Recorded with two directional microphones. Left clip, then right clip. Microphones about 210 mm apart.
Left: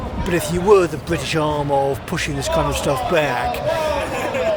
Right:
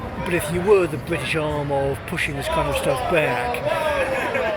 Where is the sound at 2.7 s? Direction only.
15° left (ahead or behind).